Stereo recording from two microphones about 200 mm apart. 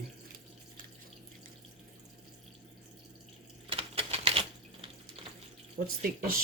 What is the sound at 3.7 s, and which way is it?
Typewriter, 30° right (ahead or behind).